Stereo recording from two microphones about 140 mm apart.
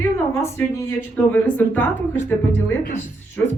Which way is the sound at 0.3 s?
20° left (ahead or behind).